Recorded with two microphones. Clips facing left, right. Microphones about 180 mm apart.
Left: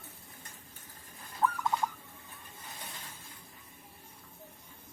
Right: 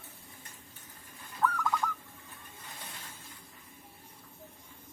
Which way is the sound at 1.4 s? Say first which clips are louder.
Even; 25° left (ahead or behind).